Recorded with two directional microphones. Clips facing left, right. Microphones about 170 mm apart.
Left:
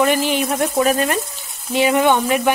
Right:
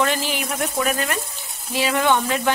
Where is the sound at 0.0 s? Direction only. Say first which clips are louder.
Left 6 dB; 15° left (ahead or behind).